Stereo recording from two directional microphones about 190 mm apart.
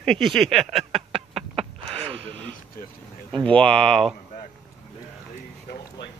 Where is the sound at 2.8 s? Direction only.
50° left (ahead or behind).